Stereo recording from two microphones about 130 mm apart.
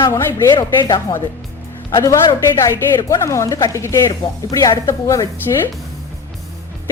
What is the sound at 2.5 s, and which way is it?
A woman's voice, 25° left (ahead or behind).